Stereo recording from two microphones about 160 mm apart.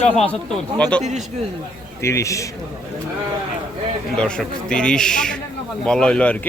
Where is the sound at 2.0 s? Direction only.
20° left (ahead or behind).